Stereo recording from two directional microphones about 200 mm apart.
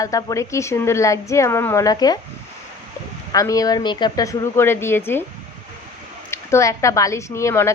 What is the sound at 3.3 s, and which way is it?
A woman's voice, 15° left (ahead or behind).